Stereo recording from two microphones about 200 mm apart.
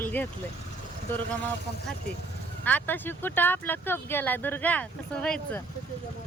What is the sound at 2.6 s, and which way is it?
Speech, 10° left (ahead or behind).